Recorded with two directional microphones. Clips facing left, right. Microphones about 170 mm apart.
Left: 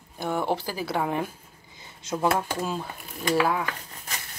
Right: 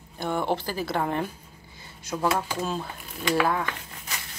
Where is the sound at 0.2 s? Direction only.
10° left (ahead or behind).